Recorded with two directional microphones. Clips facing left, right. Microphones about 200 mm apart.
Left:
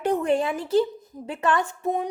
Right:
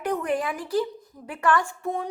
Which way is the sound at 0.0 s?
25° left (ahead or behind).